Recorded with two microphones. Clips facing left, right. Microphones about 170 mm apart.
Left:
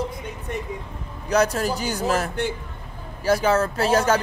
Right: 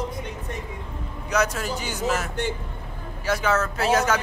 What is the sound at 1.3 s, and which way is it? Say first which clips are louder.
Speech: left 4 dB; 35° left (ahead or behind).